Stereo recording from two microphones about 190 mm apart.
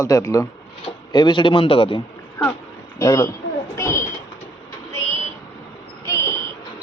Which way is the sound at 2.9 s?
15° left (ahead or behind).